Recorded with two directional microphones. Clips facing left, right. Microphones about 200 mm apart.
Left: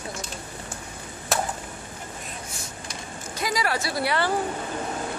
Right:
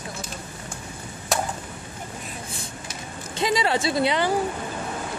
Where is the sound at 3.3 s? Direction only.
25° right (ahead or behind).